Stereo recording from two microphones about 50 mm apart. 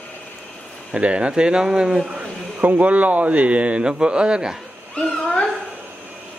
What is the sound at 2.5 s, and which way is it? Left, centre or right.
Speech, right.